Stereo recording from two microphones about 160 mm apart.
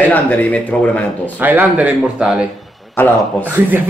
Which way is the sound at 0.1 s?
10° left (ahead or behind).